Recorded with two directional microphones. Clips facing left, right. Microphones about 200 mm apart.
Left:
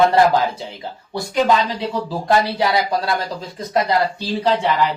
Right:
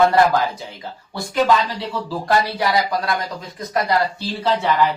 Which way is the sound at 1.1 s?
20° left (ahead or behind).